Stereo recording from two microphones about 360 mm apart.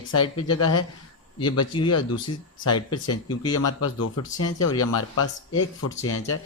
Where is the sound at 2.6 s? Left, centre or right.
Left.